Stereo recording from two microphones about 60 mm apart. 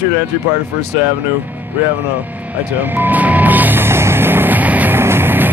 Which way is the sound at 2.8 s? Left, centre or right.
Right.